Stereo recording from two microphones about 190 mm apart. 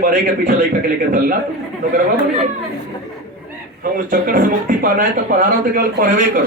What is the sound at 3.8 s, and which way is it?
A man's voice, 45° right (ahead or behind).